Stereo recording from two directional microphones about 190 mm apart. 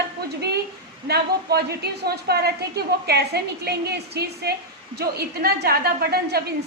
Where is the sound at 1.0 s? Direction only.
60° right (ahead or behind).